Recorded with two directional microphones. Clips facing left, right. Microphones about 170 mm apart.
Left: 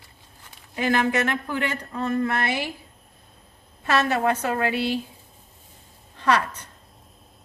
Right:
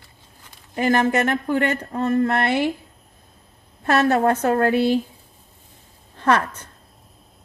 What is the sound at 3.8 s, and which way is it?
A woman's voice, 50° right (ahead or behind).